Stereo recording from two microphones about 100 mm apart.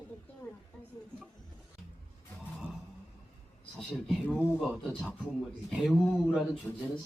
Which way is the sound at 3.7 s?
Centre (ahead or behind).